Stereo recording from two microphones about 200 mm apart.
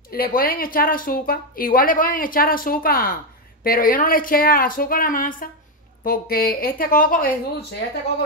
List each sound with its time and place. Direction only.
0.1 s a woman's voice: 45° left (ahead or behind)